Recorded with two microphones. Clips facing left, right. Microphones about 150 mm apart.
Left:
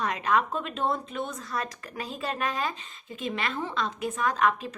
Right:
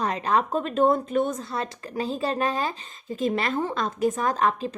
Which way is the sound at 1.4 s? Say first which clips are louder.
Right 3 dB; 30° right (ahead or behind).